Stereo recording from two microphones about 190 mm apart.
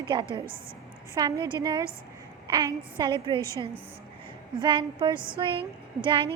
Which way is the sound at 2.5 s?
25° right (ahead or behind).